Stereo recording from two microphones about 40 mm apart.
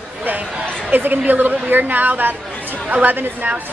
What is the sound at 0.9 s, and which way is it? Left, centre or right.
A woman's voice, right.